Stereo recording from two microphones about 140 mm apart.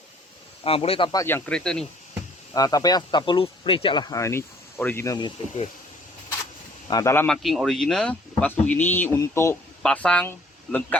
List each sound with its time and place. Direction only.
0.6 s a man's voice: 45° left (ahead or behind)
1.1 s speech: 20° left (ahead or behind)
2.5 s speech: 25° left (ahead or behind)
6.9 s speech: 20° left (ahead or behind)
7.3 s speech: centre (ahead or behind); by 9.6 s 20° left (ahead or behind)
9.8 s speech: 5° left (ahead or behind)